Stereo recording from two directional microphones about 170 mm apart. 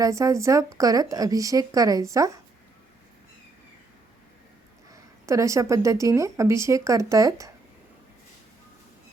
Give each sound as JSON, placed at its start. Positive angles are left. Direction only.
{"t": 0.0, "sound": "speech", "side_deg": -20}
{"t": 4.9, "sound": "speech", "side_deg": -20}